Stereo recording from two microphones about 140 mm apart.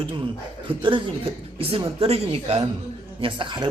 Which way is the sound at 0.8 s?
35° right (ahead or behind).